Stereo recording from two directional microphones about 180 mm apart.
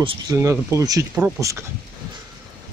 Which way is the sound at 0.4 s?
15° right (ahead or behind).